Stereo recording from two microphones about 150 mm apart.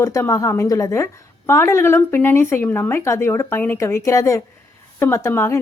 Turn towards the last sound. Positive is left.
turn(degrees=20)  # may be behind; listen again after turning